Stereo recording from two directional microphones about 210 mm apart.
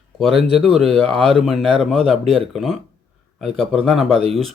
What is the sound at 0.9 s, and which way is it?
Speech, 25° right (ahead or behind).